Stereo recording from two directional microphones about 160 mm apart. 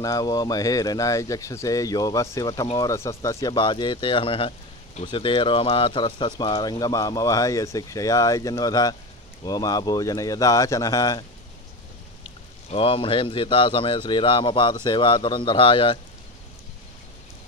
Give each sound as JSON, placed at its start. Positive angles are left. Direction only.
{"t": 0.0, "sound": "speech", "side_deg": 20}
{"t": 12.7, "sound": "a man's voice", "side_deg": 35}